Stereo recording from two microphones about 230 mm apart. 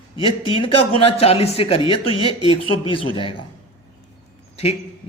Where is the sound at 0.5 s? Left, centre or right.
Left.